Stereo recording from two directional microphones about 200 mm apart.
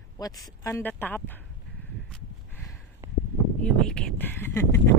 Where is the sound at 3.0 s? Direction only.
15° right (ahead or behind).